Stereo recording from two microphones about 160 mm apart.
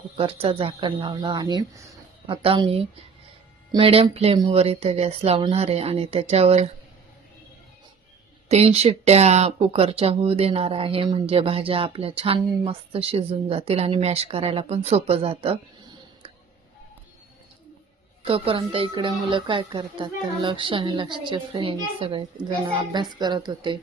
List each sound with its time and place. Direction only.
0.2 s speech: 35° right (ahead or behind)
2.2 s speech: 35° right (ahead or behind)
8.4 s speech: 40° right (ahead or behind)
18.3 s speech: 35° right (ahead or behind)